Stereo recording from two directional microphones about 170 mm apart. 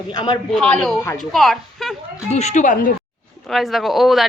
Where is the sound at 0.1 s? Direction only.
25° left (ahead or behind).